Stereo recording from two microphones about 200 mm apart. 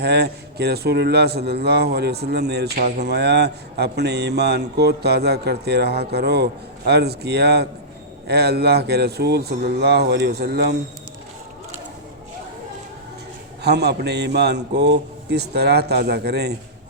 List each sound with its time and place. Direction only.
0.0 s speech: 55° right (ahead or behind)
13.6 s speech: 55° right (ahead or behind)